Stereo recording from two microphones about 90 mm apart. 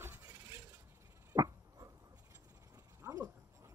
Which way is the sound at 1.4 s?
45° right (ahead or behind).